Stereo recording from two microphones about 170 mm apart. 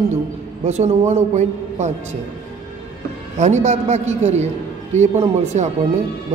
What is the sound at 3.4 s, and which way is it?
A man's voice, 40° right (ahead or behind).